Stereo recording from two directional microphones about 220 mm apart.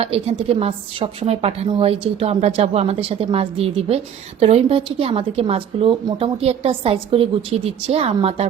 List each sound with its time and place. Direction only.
0.0 s a woman's voice: 25° right (ahead or behind)